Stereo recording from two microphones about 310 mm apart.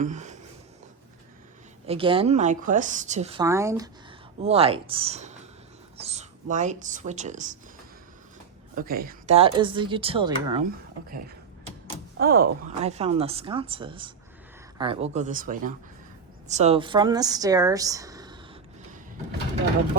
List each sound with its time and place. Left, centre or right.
0.0 s speech: right
1.9 s speech: centre
8.7 s speech: right
12.1 s speech: right; by 18.3 s centre